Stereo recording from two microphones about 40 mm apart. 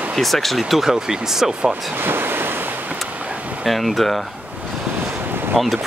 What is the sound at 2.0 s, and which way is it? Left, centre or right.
Waves, right.